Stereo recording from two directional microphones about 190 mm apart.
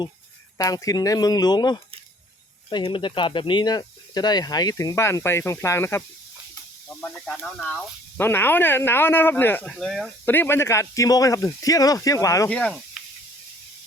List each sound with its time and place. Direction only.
0.5 s speech: 20° left (ahead or behind)
7.0 s speech: 5° left (ahead or behind)
12.5 s speech: 5° left (ahead or behind)